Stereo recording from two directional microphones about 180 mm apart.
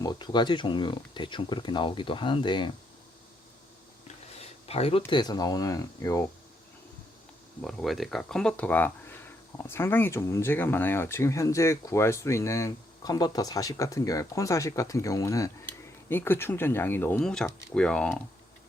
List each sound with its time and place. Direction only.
0.0 s speech: 25° left (ahead or behind)
4.4 s speech: 35° left (ahead or behind); by 6.2 s 20° left (ahead or behind)
7.6 s speech: centre (ahead or behind)